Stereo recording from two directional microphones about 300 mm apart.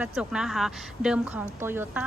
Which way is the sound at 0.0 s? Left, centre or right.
Centre.